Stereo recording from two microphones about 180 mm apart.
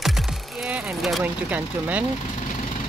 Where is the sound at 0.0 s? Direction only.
Centre (ahead or behind).